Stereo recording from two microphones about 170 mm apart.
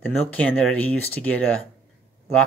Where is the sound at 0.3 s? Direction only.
10° left (ahead or behind).